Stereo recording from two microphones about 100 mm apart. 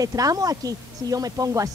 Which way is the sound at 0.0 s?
35° right (ahead or behind).